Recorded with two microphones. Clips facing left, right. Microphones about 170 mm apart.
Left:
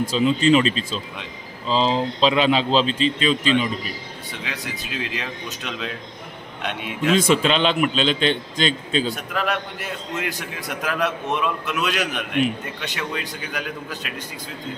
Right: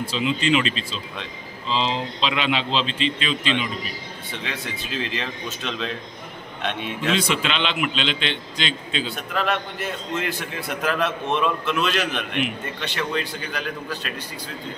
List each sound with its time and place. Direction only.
0.0 s a man's voice: 40° left (ahead or behind)
4.4 s a man's voice: 5° left (ahead or behind)
7.2 s a man's voice: 45° left (ahead or behind)
9.1 s a man's voice: 5° left (ahead or behind)